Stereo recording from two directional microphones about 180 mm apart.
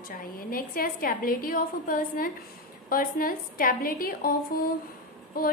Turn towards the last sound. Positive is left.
turn(degrees=55)  # may be behind; listen again after turning